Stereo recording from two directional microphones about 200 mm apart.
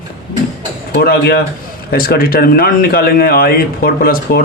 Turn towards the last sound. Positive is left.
turn(degrees=45)  # may be behind; listen again after turning